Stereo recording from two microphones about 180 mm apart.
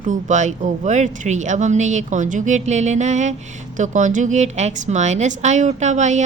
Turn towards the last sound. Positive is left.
turn(degrees=-40)  # may be behind; listen again after turning